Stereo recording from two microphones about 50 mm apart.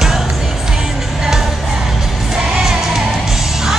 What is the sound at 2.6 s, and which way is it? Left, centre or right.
Music, centre.